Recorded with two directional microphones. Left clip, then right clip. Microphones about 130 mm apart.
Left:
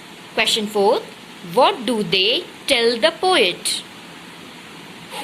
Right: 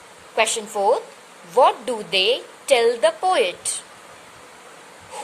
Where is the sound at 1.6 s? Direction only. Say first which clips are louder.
Left 1 dB; 25° right (ahead or behind).